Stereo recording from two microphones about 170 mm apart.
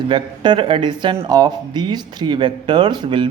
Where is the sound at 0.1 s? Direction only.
25° right (ahead or behind).